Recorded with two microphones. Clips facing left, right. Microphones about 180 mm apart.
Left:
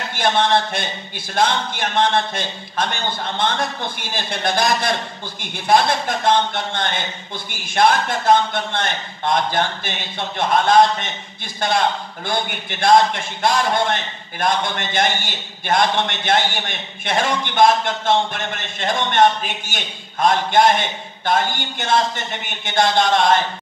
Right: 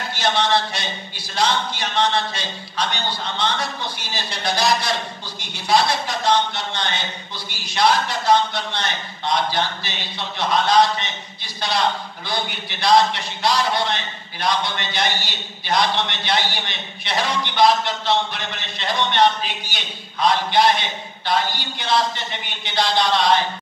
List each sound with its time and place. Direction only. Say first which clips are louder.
0.1 s speech: left 3 dB; 50° left (ahead or behind)